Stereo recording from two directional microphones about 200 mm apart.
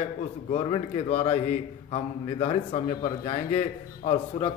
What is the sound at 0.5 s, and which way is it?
A man's voice, 30° left (ahead or behind).